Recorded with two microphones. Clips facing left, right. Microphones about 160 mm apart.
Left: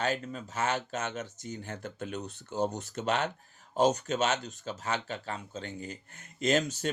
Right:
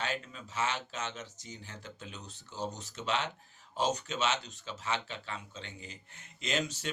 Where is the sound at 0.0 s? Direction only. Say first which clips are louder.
Left 6 dB; 45° left (ahead or behind).